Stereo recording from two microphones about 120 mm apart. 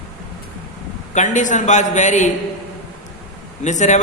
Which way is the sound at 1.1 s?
90° left.